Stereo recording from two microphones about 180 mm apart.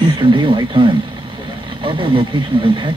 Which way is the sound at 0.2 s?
25° right (ahead or behind).